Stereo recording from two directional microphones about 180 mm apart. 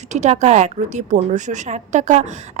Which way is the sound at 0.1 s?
40° right (ahead or behind).